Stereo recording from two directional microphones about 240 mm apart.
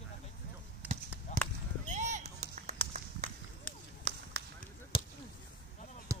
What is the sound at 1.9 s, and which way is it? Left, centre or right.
Run, right.